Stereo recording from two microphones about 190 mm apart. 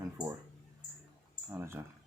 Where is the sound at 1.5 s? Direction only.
10° right (ahead or behind).